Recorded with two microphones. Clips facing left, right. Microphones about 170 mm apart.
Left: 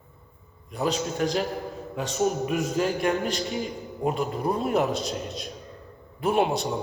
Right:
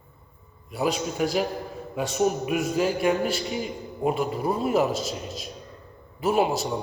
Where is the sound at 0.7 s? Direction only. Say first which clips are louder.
Right 1 dB; 5° right (ahead or behind).